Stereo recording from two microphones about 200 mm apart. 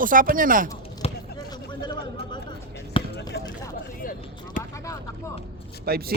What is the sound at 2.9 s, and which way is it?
Basketball bounce, 25° left (ahead or behind).